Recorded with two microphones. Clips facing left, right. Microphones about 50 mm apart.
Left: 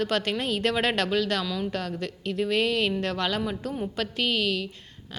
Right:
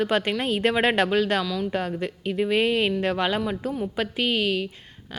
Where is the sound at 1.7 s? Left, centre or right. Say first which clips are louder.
Right 4 dB; right.